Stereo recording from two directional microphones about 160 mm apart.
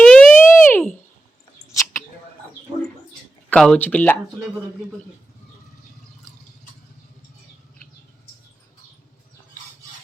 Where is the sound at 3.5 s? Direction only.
5° left (ahead or behind).